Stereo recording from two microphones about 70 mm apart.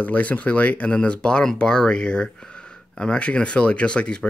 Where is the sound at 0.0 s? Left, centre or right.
Left.